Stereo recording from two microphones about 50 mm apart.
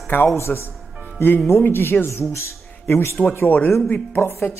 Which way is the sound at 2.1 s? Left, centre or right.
Left.